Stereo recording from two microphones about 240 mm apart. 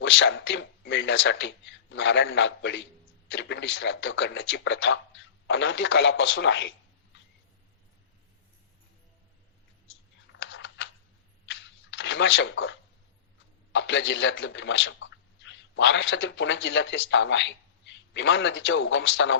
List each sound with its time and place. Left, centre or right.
0.0 s a man's voice: left
10.3 s computer keyboard: left
11.4 s a sound: left
13.7 s a man's voice: left